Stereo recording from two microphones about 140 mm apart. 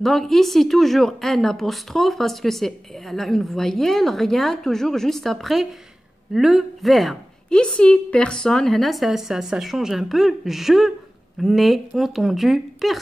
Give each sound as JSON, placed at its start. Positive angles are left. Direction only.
{"t": 0.0, "sound": "a woman's voice", "side_deg": 0}